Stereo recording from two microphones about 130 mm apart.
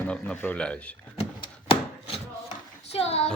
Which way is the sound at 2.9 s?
50° left (ahead or behind).